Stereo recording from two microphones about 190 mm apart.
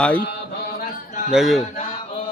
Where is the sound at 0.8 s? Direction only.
40° left (ahead or behind).